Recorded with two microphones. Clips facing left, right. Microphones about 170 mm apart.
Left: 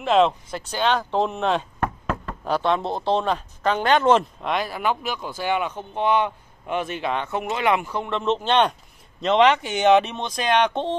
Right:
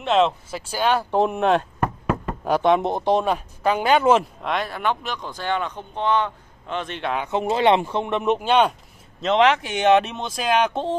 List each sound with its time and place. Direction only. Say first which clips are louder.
0.0 s speech: left 1 dB; centre (ahead or behind)
7.2 s speech: right 6 dB; 30° right (ahead or behind); by 11.0 s 5° right (ahead or behind)